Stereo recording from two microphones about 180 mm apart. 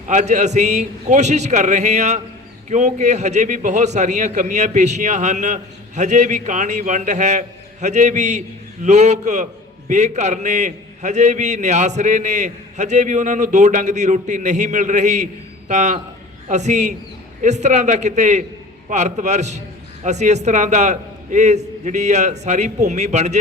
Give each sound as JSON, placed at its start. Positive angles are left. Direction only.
{"t": 0.1, "sound": "a man's voice", "side_deg": -40}